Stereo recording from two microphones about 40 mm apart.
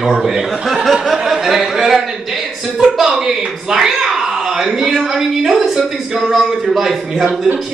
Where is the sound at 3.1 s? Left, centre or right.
Centre.